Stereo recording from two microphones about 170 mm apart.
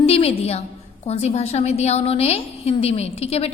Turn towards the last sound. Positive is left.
turn(degrees=35)  # may be behind; listen again after turning